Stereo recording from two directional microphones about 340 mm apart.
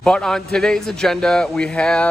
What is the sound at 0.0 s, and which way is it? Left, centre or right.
Speech, centre.